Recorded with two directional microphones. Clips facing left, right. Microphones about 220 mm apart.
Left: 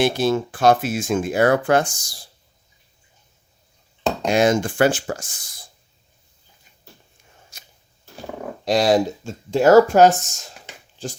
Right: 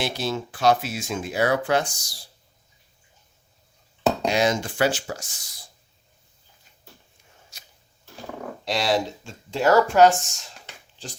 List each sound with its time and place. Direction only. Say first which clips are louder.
0.0 s speech: left 8 dB; 50° left (ahead or behind)
4.3 s speech: left 10 dB; 50° left (ahead or behind)
7.5 s a sound: left 2 dB; 50° left (ahead or behind)
8.6 s speech: left 7 dB; 40° left (ahead or behind)